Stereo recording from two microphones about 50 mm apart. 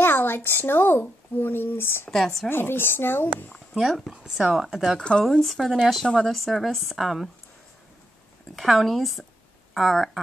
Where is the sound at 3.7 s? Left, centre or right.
Centre.